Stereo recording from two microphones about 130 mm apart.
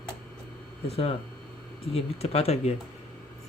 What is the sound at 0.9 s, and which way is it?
A man's voice, 50° left (ahead or behind).